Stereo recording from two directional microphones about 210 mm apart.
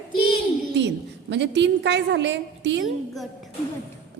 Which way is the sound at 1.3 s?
55° right (ahead or behind).